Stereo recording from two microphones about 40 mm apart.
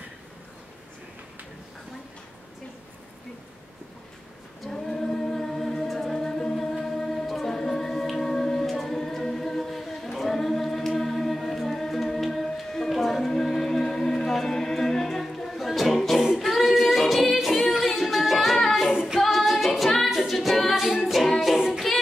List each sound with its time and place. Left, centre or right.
4.6 s singing: centre
11.0 s a capella: centre
16.3 s singing: centre
19.1 s female singing: centre
20.1 s a capella: centre
21.9 s music: centre